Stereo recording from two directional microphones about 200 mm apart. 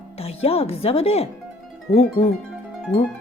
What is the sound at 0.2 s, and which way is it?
Speech, 30° left (ahead or behind).